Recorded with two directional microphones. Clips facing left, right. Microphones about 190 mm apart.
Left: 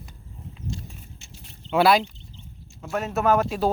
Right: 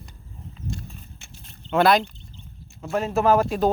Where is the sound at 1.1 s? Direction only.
60° right (ahead or behind).